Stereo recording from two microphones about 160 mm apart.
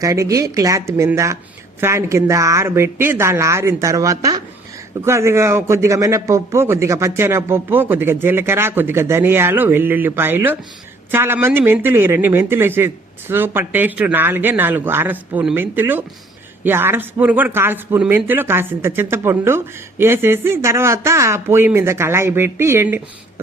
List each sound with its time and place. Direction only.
0.0 s speech: 20° right (ahead or behind)